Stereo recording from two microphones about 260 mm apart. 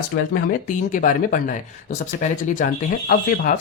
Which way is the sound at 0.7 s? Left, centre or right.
Left.